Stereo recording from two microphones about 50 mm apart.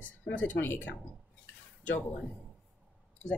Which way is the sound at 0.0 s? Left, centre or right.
Left.